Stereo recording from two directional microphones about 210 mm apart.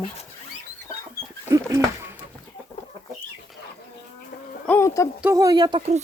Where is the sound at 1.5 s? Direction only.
15° right (ahead or behind).